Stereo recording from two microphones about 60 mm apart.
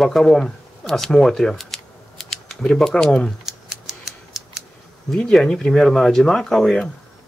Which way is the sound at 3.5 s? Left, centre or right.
Centre.